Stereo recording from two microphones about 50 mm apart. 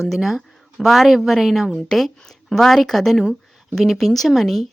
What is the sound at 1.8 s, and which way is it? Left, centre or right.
Speech, centre.